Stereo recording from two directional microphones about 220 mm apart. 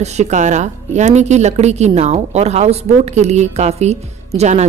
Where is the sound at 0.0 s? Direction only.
30° right (ahead or behind).